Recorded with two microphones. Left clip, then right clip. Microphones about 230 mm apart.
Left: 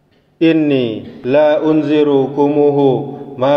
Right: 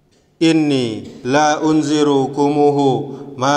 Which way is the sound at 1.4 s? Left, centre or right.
Right.